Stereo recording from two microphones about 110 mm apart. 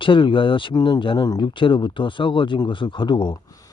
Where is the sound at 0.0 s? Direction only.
50° left (ahead or behind).